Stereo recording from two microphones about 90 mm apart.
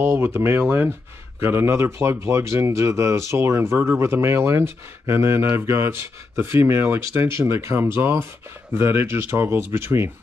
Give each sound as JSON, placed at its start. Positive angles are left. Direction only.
{"t": 0.0, "sound": "speech", "side_deg": -25}